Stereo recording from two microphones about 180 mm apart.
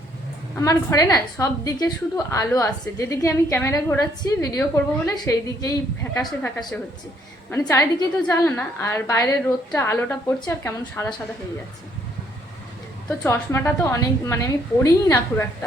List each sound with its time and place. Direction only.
0.6 s a woman's voice: 20° left (ahead or behind)
7.7 s a woman's voice: 15° left (ahead or behind)
13.1 s a woman's voice: 15° left (ahead or behind)